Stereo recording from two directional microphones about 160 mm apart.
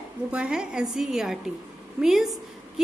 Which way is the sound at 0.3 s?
5° right (ahead or behind).